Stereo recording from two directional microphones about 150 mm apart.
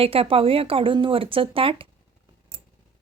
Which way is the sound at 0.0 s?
40° right (ahead or behind).